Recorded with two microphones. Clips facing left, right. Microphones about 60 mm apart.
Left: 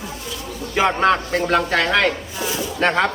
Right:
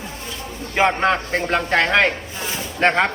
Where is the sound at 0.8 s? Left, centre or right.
Right.